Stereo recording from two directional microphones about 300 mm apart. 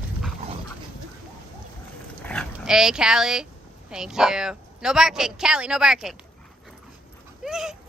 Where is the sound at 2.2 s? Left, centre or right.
Centre.